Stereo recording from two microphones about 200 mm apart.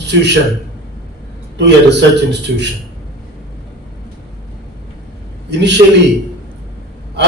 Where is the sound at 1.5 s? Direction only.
60° right (ahead or behind).